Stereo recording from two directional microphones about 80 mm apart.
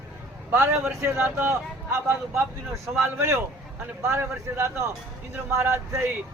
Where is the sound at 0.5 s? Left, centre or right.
Right.